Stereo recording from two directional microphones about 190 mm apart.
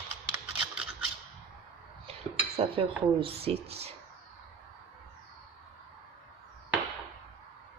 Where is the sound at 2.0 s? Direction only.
30° right (ahead or behind).